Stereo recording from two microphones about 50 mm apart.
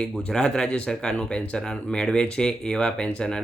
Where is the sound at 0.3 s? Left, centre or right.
Centre.